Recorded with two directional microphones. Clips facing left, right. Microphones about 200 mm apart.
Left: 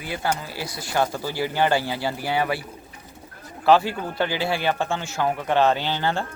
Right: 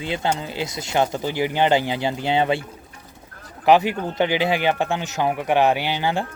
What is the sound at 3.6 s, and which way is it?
Speech, 20° right (ahead or behind).